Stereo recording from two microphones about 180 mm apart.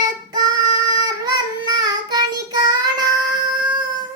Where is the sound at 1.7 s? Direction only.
20° right (ahead or behind).